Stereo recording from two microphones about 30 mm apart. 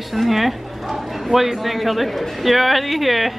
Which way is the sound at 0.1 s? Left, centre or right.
Centre.